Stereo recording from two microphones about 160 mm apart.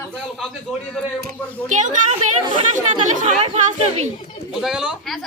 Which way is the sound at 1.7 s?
50° right (ahead or behind).